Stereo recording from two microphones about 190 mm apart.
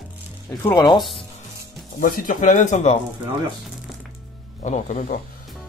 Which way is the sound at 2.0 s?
50° left (ahead or behind).